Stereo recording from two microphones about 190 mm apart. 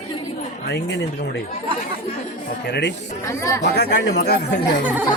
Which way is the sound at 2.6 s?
60° left (ahead or behind).